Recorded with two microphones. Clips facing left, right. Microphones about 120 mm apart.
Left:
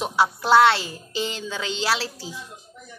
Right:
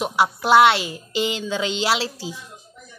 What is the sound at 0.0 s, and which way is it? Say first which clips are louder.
A woman's voice: right 1 dB; 10° right (ahead or behind).